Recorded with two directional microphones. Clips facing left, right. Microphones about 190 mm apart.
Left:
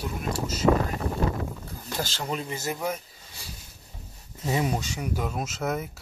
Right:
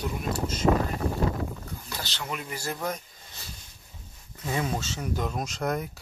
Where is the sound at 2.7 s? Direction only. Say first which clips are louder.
Even; 5° left (ahead or behind).